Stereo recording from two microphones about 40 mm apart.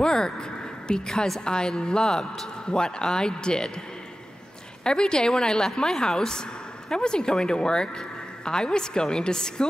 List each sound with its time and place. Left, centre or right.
0.0 s a man's voice: centre
4.8 s a man's voice: left